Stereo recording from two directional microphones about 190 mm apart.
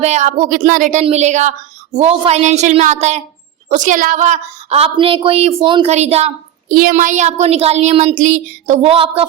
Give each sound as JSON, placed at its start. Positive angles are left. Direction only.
{"t": 0.0, "sound": "speech", "side_deg": -35}
{"t": 6.7, "sound": "speech", "side_deg": -45}
{"t": 8.9, "sound": "a woman's voice", "side_deg": -30}